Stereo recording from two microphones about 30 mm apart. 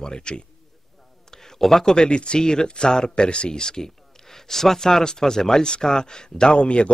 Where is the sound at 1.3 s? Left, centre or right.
Centre.